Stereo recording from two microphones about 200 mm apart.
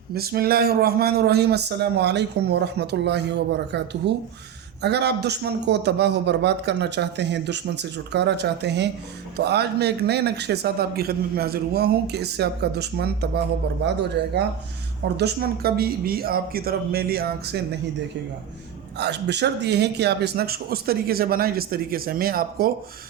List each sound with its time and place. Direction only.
0.1 s a man's voice: 50° right (ahead or behind)
18.9 s a man's voice: 55° right (ahead or behind)